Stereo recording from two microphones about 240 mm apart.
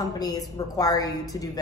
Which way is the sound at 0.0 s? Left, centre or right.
Centre.